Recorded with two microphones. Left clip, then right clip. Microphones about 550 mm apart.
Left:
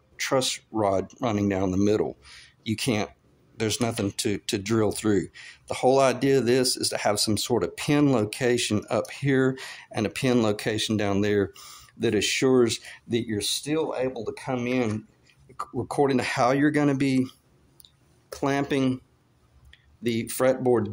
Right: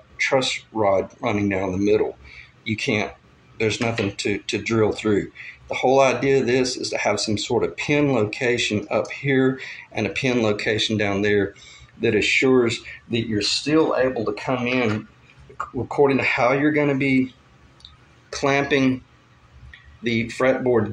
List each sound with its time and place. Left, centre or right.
0.2 s speech: left
18.3 s speech: left
20.0 s speech: left